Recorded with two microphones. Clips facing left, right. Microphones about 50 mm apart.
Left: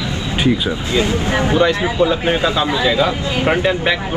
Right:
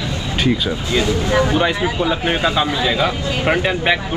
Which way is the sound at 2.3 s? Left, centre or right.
Right.